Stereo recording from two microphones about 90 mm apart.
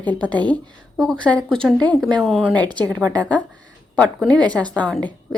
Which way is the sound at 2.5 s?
50° right (ahead or behind).